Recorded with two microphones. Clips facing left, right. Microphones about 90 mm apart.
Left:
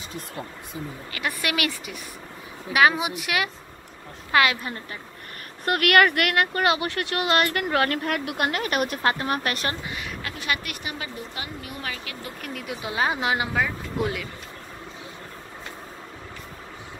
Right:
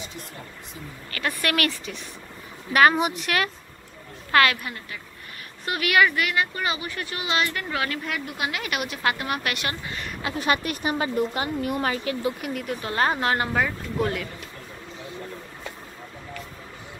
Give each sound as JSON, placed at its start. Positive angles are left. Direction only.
{"t": 1.1, "sound": "a woman's voice", "side_deg": 15}
{"t": 5.7, "sound": "speech", "side_deg": 55}
{"t": 10.4, "sound": "speech", "side_deg": -35}
{"t": 12.4, "sound": "speech", "side_deg": -5}
{"t": 12.6, "sound": "speech", "side_deg": 5}